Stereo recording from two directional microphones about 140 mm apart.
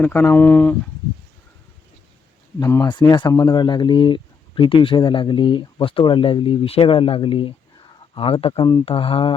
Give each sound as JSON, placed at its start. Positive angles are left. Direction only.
{"t": 0.0, "sound": "speech", "side_deg": 15}
{"t": 2.6, "sound": "speech", "side_deg": 20}
{"t": 2.8, "sound": "speech", "side_deg": 30}